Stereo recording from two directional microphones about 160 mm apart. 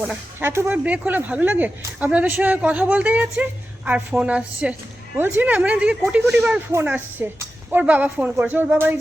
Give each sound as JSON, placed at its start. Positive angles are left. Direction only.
{"t": 0.0, "sound": "speech", "side_deg": -10}